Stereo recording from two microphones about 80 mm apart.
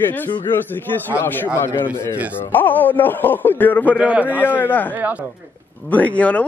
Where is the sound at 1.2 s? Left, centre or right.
Left.